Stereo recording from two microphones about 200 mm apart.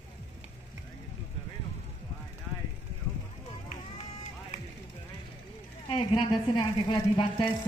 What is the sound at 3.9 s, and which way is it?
Run, 35° left (ahead or behind).